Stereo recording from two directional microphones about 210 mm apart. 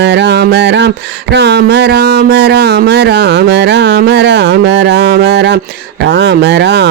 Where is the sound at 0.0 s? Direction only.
55° right (ahead or behind).